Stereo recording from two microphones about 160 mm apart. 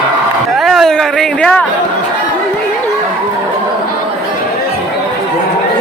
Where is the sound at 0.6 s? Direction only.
Centre (ahead or behind).